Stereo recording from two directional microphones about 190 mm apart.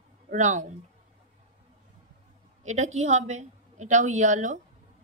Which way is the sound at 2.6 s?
35° right (ahead or behind).